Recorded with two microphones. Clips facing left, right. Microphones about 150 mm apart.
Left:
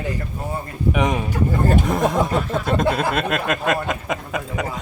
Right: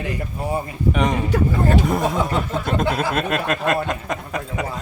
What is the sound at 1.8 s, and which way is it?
A man's voice, centre (ahead or behind).